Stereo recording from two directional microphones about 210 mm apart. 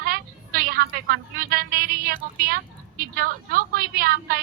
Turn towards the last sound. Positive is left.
turn(degrees=-45)  # may be behind; listen again after turning